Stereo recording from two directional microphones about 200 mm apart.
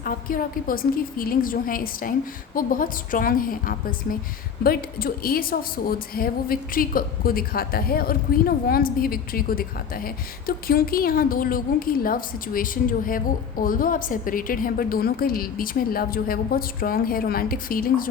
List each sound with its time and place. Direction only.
0.0 s a woman's voice: 45° left (ahead or behind)